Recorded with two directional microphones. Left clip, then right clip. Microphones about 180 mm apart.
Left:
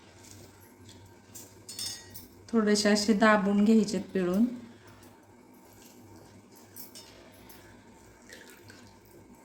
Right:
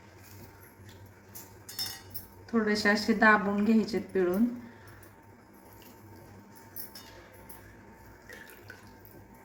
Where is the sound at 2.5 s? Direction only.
50° left (ahead or behind).